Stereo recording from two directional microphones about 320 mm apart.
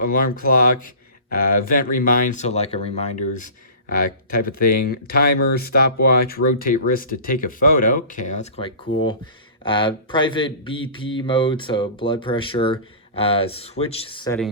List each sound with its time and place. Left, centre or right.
0.0 s speech: left